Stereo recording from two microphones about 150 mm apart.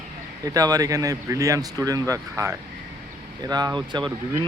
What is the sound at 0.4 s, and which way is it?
Speech, 25° right (ahead or behind).